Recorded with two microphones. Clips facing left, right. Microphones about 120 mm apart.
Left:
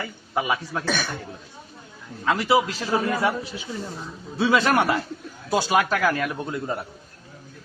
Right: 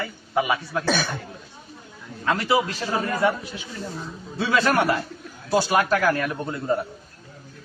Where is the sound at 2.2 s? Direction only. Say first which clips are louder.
Left 1 dB; 15° left (ahead or behind).